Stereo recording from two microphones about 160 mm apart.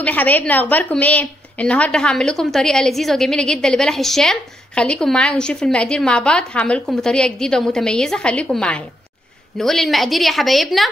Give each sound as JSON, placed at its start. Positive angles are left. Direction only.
{"t": 0.0, "sound": "a woman's voice", "side_deg": 10}